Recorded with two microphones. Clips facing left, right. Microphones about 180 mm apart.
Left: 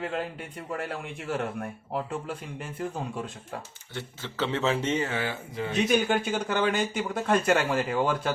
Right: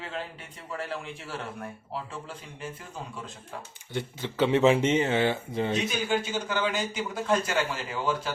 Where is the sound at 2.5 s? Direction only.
60° left (ahead or behind).